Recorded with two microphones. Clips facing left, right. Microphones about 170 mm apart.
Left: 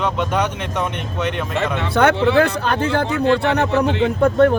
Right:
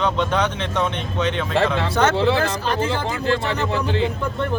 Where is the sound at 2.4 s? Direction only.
65° left (ahead or behind).